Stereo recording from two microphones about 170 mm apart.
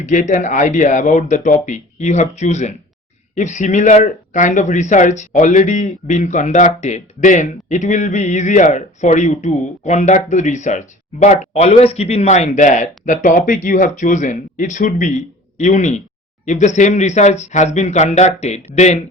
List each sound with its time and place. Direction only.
0.0 s speech: 45° left (ahead or behind)